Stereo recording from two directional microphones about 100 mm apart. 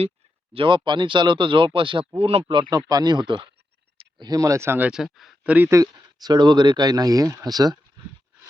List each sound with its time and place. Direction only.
0.5 s speech: 55° right (ahead or behind)
2.1 s speech: 85° right
2.6 s speech: 45° right (ahead or behind)
4.3 s speech: 35° right (ahead or behind)
4.9 s speech: 5° right (ahead or behind)
5.4 s a sound: 15° right (ahead or behind)
5.6 s speech: 35° right (ahead or behind)